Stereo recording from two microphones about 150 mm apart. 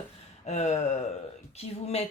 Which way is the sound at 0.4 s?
50° left (ahead or behind).